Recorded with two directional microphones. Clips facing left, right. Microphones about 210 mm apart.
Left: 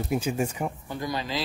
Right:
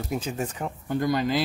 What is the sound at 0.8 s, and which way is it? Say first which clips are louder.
Speech: right 7 dB; 55° right (ahead or behind).